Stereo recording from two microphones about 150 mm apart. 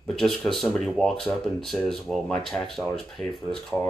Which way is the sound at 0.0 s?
5° left (ahead or behind).